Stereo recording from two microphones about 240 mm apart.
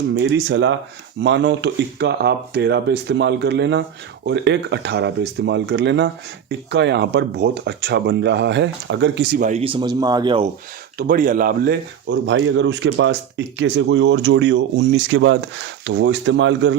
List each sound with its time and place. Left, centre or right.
0.2 s speech: right
10.9 s speech: right